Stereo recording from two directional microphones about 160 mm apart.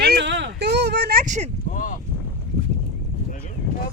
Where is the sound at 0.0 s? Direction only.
80° right.